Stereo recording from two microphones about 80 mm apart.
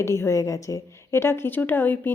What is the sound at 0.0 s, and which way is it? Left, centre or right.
A woman's voice, left.